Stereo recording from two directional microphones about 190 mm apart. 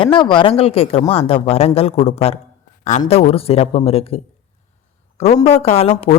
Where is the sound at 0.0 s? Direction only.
25° left (ahead or behind).